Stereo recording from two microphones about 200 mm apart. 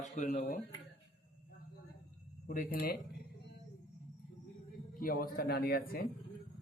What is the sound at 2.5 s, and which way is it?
Speech, 45° left (ahead or behind).